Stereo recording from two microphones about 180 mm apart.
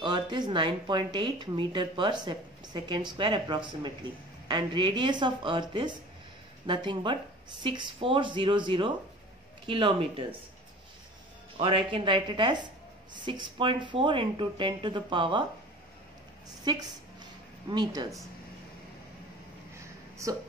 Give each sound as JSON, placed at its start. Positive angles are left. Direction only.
{"t": 0.0, "sound": "speech", "side_deg": -25}
{"t": 11.5, "sound": "speech", "side_deg": -30}
{"t": 16.7, "sound": "speech", "side_deg": -25}